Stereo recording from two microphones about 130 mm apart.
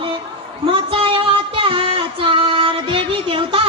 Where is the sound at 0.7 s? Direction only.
45° right (ahead or behind).